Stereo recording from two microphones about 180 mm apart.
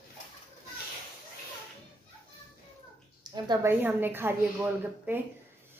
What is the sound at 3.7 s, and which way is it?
A woman's voice, 10° right (ahead or behind).